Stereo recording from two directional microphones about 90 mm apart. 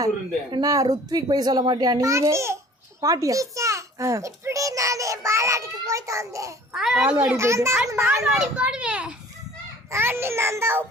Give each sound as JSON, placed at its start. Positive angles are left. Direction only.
{"t": 0.6, "sound": "a child's voice", "side_deg": -40}
{"t": 6.7, "sound": "a child's voice", "side_deg": -5}
{"t": 7.0, "sound": "a child's voice", "side_deg": -20}
{"t": 7.3, "sound": "a child's voice", "side_deg": -30}
{"t": 8.2, "sound": "a child's voice", "side_deg": -5}
{"t": 9.9, "sound": "a child's voice", "side_deg": -25}